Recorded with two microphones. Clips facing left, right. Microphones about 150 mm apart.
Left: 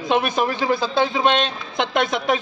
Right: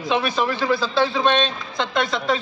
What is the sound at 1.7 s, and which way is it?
Speech, 55° left (ahead or behind).